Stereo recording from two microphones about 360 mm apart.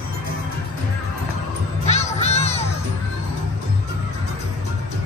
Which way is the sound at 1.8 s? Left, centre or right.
Centre.